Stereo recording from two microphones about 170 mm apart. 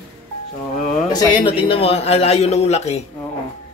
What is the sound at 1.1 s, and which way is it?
A man's voice, 25° left (ahead or behind).